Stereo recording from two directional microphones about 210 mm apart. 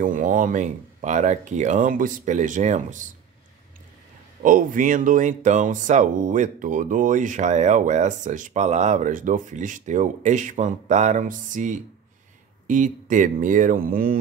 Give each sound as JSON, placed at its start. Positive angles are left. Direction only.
{"t": 0.0, "sound": "speech", "side_deg": -40}
{"t": 4.4, "sound": "speech", "side_deg": -40}